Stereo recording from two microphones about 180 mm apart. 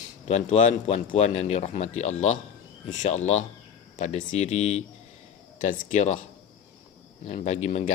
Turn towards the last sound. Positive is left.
turn(degrees=40)  # may be behind; listen again after turning